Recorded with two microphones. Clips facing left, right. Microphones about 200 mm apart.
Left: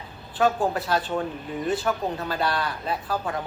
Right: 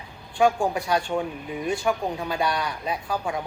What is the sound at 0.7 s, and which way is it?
Speech, 10° right (ahead or behind).